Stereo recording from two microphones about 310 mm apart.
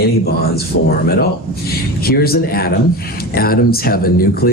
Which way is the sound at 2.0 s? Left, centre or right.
Left.